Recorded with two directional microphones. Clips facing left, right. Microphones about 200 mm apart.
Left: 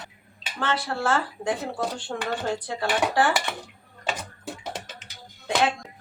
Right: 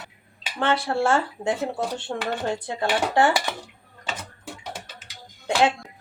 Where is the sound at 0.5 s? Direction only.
25° right (ahead or behind).